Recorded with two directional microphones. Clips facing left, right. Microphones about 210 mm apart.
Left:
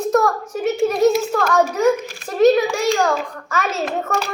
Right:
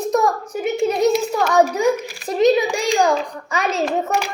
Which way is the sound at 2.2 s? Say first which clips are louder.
Left 2 dB; 15° right (ahead or behind).